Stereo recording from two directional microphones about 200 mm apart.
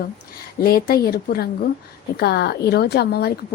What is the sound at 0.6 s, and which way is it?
A woman's voice, 50° left (ahead or behind).